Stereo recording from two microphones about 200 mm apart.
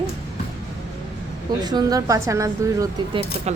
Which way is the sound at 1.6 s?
20° right (ahead or behind).